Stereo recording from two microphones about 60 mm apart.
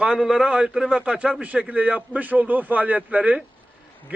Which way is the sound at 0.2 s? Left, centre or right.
Centre.